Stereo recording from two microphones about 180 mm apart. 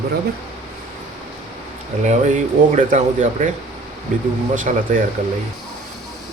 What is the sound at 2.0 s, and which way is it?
Speech, 40° right (ahead or behind).